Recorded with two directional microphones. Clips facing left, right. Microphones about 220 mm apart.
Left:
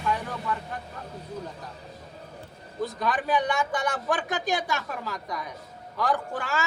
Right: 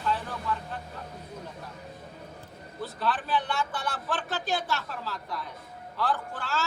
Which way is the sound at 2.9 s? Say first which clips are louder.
Left 2 dB; 15° left (ahead or behind).